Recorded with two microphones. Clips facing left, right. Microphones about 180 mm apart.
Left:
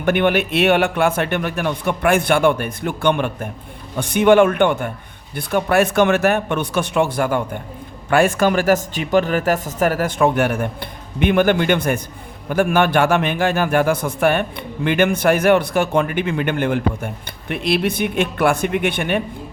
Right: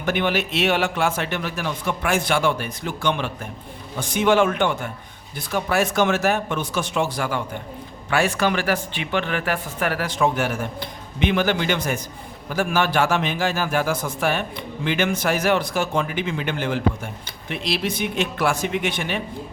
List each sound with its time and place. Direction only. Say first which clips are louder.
0.0 s speech: left 6 dB; 55° left (ahead or behind)